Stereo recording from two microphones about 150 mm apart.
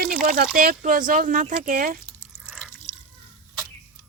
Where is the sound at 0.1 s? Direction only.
75° right (ahead or behind).